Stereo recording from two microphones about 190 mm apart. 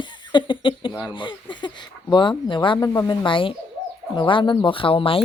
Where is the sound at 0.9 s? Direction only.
15° left (ahead or behind).